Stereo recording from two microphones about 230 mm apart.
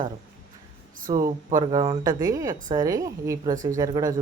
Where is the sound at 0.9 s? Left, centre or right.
Right.